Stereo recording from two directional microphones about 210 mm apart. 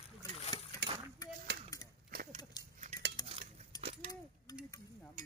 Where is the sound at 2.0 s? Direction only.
40° right (ahead or behind).